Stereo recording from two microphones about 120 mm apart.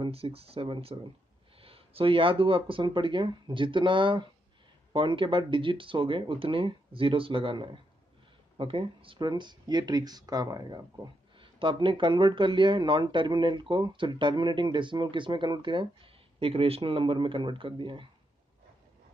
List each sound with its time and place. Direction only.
0.0 s speech: 55° right (ahead or behind); by 11.1 s 30° right (ahead or behind)
11.3 s speech: 45° right (ahead or behind)